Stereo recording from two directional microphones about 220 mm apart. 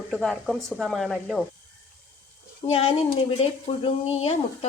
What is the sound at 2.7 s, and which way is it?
A woman's voice, 25° left (ahead or behind).